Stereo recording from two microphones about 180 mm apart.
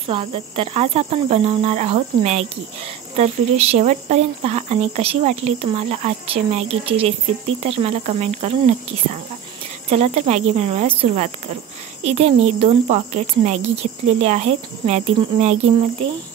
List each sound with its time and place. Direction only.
0.1 s speech: 30° right (ahead or behind)